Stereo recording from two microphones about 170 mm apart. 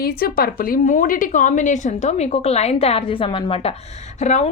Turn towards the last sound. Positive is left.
turn(degrees=45)  # may be behind; listen again after turning